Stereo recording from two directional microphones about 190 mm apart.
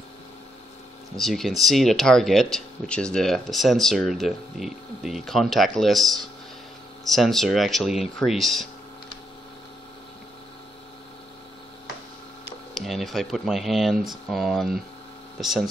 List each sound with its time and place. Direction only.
1.1 s speech: centre (ahead or behind)
12.7 s speech: centre (ahead or behind)